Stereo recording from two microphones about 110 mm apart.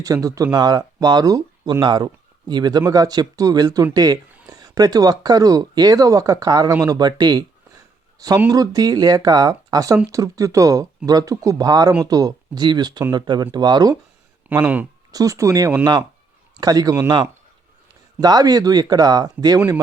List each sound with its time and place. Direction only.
0.0 s speech: 30° right (ahead or behind)
8.4 s speech: 35° right (ahead or behind)
14.5 s speech: 15° right (ahead or behind)
15.1 s speech: 30° right (ahead or behind)
18.2 s speech: 35° right (ahead or behind)